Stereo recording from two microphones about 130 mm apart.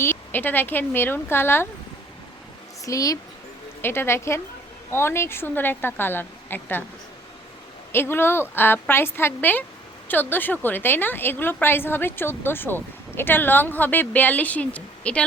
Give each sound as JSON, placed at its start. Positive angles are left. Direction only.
{"t": 0.0, "sound": "a woman's voice", "side_deg": 15}
{"t": 2.8, "sound": "a woman's voice", "side_deg": 25}
{"t": 7.9, "sound": "a woman's voice", "side_deg": 20}